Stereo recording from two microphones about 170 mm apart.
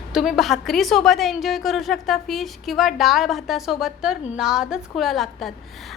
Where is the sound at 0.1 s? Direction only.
Centre (ahead or behind).